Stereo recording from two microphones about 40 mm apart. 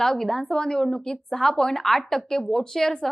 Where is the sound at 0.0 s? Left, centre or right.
Centre.